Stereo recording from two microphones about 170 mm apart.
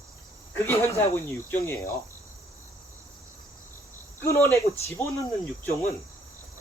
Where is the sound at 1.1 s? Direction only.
15° left (ahead or behind).